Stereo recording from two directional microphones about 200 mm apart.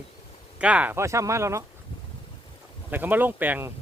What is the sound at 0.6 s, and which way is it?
Speech, 5° right (ahead or behind).